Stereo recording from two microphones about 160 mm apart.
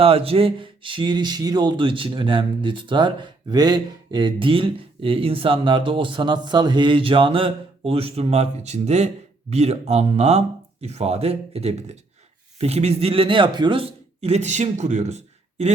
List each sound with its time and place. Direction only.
0.0 s speech: 35° right (ahead or behind)